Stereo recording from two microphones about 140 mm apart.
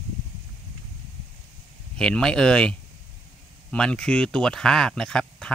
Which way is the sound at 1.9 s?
5° left (ahead or behind).